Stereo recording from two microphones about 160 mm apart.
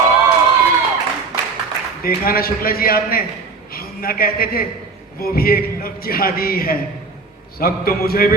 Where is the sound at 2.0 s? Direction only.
65° left (ahead or behind).